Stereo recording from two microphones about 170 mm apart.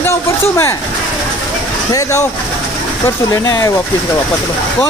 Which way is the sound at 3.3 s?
20° left (ahead or behind).